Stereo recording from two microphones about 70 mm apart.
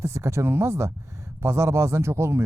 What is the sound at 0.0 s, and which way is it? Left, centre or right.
A man's voice, right.